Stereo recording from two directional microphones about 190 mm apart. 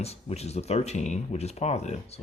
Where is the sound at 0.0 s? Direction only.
35° left (ahead or behind).